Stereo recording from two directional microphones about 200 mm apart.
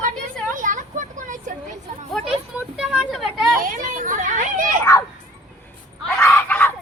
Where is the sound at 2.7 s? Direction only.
5° right (ahead or behind).